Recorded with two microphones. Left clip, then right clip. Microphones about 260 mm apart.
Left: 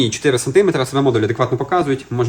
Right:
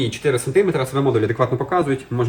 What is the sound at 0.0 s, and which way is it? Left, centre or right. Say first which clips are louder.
Speech: left 4 dB; left.